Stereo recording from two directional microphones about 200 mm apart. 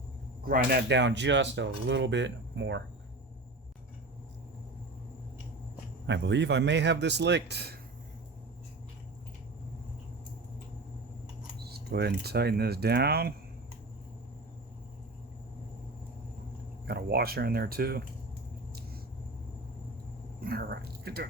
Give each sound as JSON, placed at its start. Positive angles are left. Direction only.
{"t": 0.4, "sound": "speech", "side_deg": -50}
{"t": 6.1, "sound": "speech", "side_deg": -60}
{"t": 11.6, "sound": "speech", "side_deg": -55}
{"t": 16.8, "sound": "speech", "side_deg": -55}
{"t": 20.4, "sound": "speech", "side_deg": -50}